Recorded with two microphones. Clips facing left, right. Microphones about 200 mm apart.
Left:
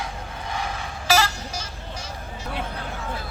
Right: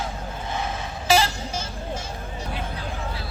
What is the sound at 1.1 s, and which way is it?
Music, 25° right (ahead or behind).